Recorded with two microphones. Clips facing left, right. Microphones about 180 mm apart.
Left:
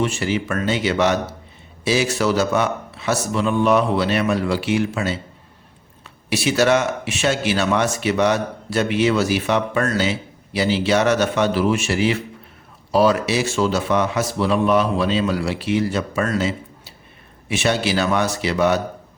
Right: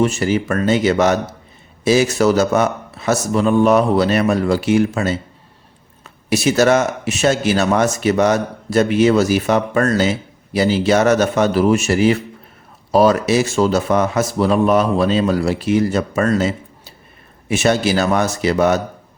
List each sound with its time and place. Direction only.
0.0 s a man's voice: 45° right (ahead or behind)